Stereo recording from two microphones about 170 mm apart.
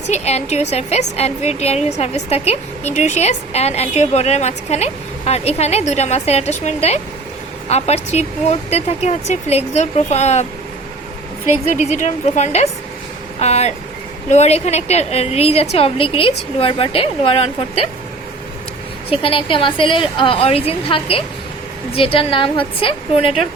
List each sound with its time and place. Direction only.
0.1 s a woman's voice: 40° left (ahead or behind)
11.7 s a woman's voice: 45° left (ahead or behind)
19.1 s a woman's voice: 30° left (ahead or behind)